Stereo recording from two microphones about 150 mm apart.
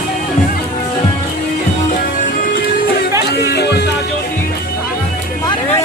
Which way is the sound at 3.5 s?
90° left.